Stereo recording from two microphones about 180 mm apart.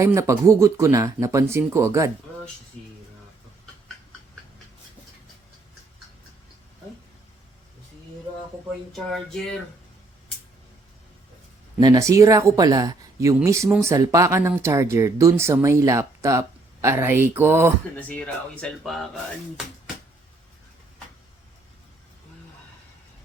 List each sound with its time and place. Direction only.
0.0 s speech: 15° right (ahead or behind)
8.9 s speech: 5° left (ahead or behind)
11.8 s speech: 20° right (ahead or behind)
18.1 s speech: 5° left (ahead or behind)